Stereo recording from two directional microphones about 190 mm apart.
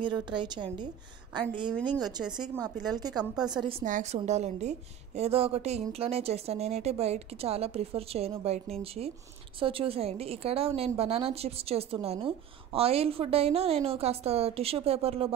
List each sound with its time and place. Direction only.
0.0 s a woman's voice: 25° right (ahead or behind)
1.9 s a woman's voice: 20° right (ahead or behind)
3.3 s a woman's voice: 5° right (ahead or behind)
3.8 s a woman's voice: 40° right (ahead or behind)